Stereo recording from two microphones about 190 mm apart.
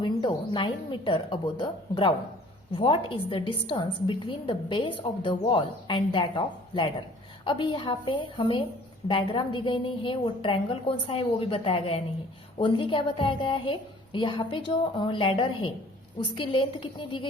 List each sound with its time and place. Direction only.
0.0 s a woman's voice: 25° left (ahead or behind)